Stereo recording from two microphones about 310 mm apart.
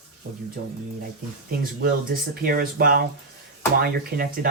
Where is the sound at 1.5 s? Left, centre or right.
Right.